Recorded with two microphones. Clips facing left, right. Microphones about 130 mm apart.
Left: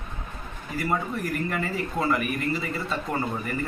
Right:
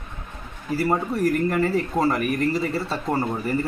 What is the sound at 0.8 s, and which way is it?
Speech, 35° right (ahead or behind).